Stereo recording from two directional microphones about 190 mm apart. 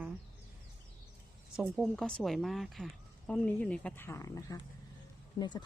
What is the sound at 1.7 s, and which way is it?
Speech, centre (ahead or behind).